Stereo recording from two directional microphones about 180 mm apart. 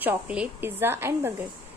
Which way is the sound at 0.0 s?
10° right (ahead or behind).